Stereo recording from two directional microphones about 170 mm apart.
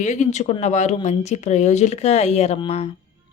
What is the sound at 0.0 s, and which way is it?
A woman's voice, 45° left (ahead or behind).